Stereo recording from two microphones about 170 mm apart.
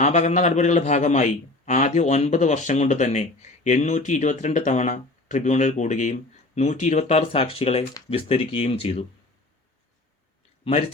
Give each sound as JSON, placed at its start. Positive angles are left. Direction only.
{"t": 0.0, "sound": "a man's voice", "side_deg": 40}
{"t": 10.6, "sound": "speech", "side_deg": 35}